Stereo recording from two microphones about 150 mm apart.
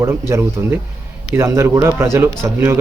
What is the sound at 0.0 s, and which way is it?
A man's voice, 15° right (ahead or behind).